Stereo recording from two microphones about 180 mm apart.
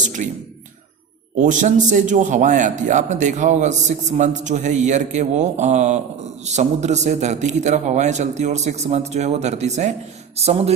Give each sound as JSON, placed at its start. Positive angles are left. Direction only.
{"t": 0.0, "sound": "speech", "side_deg": -45}
{"t": 1.4, "sound": "a man's voice", "side_deg": -45}